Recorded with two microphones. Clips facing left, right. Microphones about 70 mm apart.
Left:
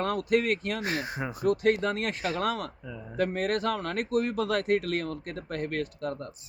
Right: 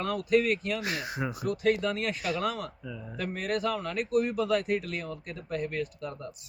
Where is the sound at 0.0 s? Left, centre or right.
Left.